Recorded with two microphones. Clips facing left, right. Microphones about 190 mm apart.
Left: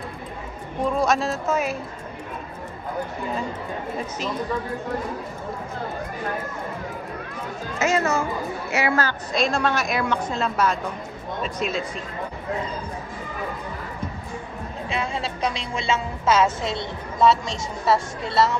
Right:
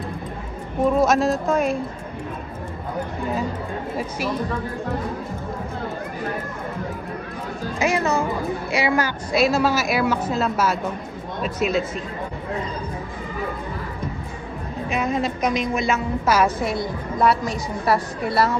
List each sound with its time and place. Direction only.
0.8 s a woman's voice: centre (ahead or behind)
7.8 s a woman's voice: 15° right (ahead or behind)
15.0 s a woman's voice: 30° left (ahead or behind)